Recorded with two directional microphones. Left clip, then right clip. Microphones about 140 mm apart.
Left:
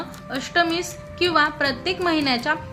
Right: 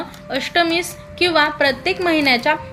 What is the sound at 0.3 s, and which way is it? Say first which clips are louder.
A woman's voice: right 4 dB; 25° right (ahead or behind).